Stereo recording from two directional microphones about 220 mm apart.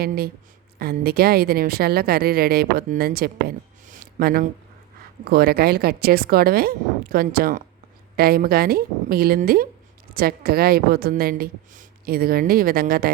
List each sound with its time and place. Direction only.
0.8 s a woman's voice: 45° right (ahead or behind)